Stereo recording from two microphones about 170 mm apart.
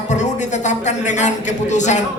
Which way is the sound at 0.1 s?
45° left (ahead or behind).